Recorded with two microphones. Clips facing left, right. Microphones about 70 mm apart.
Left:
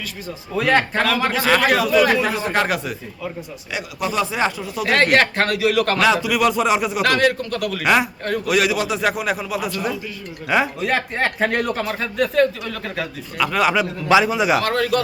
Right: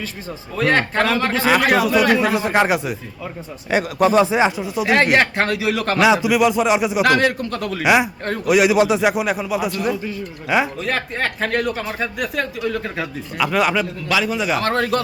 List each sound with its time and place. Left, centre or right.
0.5 s speech: centre
1.5 s speech: centre
3.7 s speech: right
4.2 s speech: right
7.9 s speech: centre
8.7 s speech: right
13.4 s speech: centre
14.1 s a man's voice: centre
14.6 s speech: right